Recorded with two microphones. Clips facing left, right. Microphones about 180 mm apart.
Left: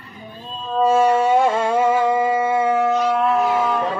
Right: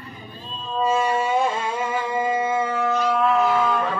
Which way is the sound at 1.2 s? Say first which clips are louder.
Left 6 dB; 70° left (ahead or behind).